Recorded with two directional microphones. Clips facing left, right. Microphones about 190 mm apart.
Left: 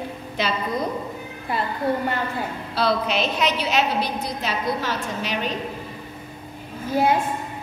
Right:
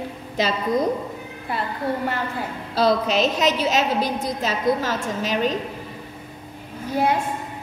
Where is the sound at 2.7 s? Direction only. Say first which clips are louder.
Right 3 dB; 45° right (ahead or behind).